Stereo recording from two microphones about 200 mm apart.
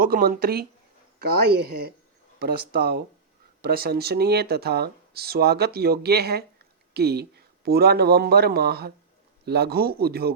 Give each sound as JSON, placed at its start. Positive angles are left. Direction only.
{"t": 0.0, "sound": "speech", "side_deg": -50}